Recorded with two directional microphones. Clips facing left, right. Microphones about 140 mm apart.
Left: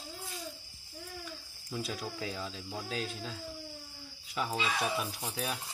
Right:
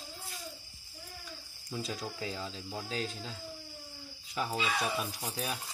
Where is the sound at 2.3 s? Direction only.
15° right (ahead or behind).